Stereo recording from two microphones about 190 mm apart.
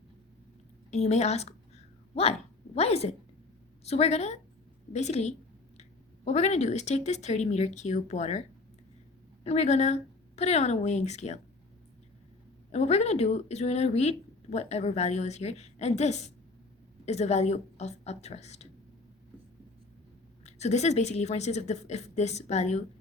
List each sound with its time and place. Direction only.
0.9 s speech: 35° left (ahead or behind)
2.7 s speech: 35° left (ahead or behind)
9.4 s a woman's voice: 35° left (ahead or behind)
12.7 s speech: 35° left (ahead or behind)
20.4 s speech: 35° left (ahead or behind)